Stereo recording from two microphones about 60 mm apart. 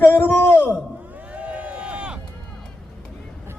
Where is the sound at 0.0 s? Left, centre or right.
Left.